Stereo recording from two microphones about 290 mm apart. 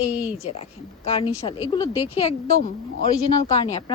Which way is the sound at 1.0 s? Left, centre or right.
Centre.